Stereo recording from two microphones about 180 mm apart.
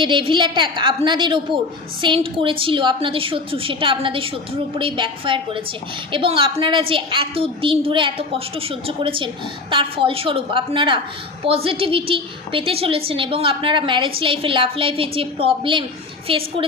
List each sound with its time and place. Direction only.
0.0 s a woman's voice: 25° right (ahead or behind)